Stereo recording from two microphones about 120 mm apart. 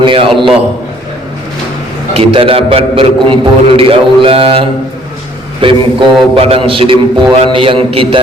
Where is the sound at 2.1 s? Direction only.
50° right (ahead or behind).